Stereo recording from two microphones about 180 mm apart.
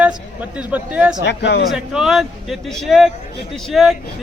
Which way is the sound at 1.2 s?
75° left (ahead or behind).